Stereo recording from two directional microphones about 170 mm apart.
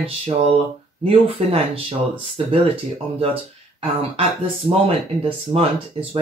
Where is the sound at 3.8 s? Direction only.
35° right (ahead or behind).